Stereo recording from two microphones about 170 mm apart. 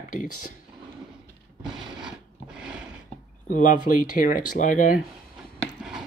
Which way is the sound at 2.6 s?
5° right (ahead or behind).